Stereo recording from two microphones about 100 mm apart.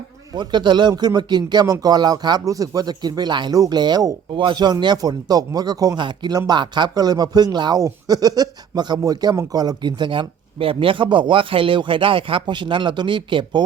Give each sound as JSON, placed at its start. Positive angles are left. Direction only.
{"t": 0.3, "sound": "speech", "side_deg": -50}
{"t": 6.0, "sound": "speech", "side_deg": -50}
{"t": 9.3, "sound": "speech", "side_deg": -35}